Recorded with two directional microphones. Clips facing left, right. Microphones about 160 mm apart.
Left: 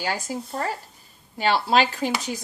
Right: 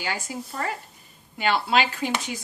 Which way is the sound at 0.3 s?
40° left (ahead or behind).